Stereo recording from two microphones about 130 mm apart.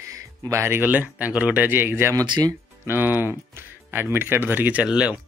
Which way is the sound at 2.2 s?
30° right (ahead or behind).